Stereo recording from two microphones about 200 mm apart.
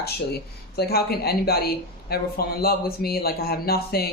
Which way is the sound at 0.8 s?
50° left (ahead or behind).